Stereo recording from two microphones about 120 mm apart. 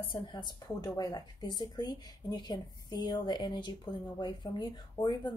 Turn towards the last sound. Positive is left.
turn(degrees=40)  # may be behind; listen again after turning